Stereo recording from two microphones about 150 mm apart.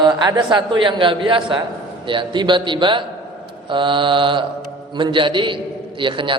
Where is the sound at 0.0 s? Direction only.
30° right (ahead or behind).